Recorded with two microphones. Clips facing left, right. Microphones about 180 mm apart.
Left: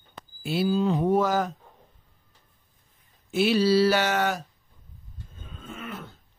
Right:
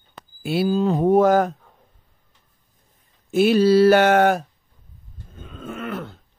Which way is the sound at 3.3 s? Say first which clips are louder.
Right 6 dB; 50° right (ahead or behind).